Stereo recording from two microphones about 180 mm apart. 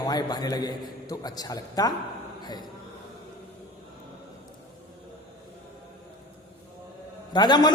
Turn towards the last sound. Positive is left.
turn(degrees=25)  # may be behind; listen again after turning